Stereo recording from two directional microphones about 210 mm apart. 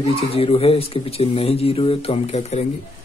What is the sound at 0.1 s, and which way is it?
Speech, 30° left (ahead or behind).